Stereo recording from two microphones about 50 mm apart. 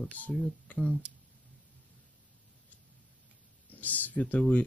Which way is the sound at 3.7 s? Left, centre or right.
Left.